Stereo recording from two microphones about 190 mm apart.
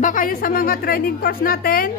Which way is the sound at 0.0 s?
45° left (ahead or behind).